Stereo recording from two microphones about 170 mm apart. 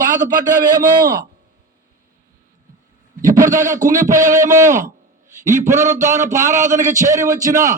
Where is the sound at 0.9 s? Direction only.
20° right (ahead or behind).